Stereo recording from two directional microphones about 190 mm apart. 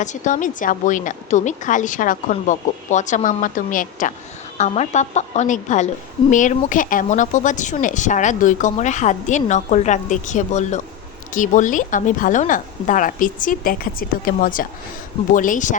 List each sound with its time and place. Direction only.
0.0 s a woman's voice: 40° left (ahead or behind)